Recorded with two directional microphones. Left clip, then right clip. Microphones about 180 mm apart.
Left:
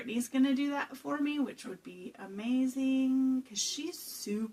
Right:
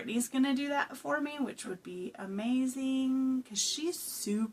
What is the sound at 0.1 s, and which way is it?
Speech, 40° right (ahead or behind).